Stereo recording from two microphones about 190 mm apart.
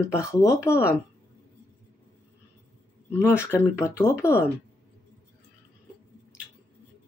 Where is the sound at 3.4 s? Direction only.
15° left (ahead or behind).